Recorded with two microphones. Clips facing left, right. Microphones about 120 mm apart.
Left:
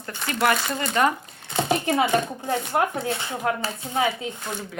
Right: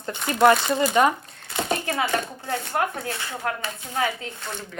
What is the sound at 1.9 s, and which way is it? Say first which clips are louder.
Speech: left 4 dB; 20° left (ahead or behind).